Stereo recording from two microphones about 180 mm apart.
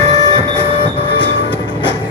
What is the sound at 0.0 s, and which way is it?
Train, 20° left (ahead or behind).